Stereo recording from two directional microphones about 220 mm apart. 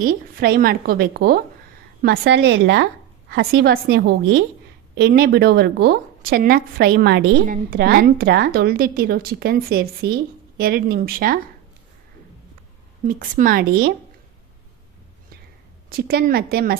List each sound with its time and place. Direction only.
0.0 s a woman's voice: 40° right (ahead or behind)
13.1 s speech: 40° right (ahead or behind)
15.9 s a woman's voice: 45° right (ahead or behind)